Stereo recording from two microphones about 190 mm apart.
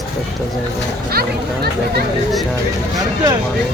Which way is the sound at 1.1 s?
55° right (ahead or behind).